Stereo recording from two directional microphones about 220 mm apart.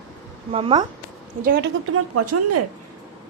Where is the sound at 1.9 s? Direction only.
90° right.